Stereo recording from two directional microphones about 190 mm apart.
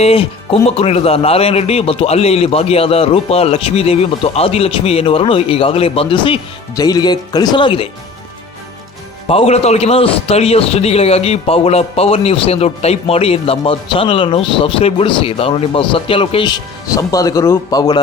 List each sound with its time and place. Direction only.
0.0 s speech: 30° left (ahead or behind)
9.2 s a man's voice: 30° left (ahead or behind)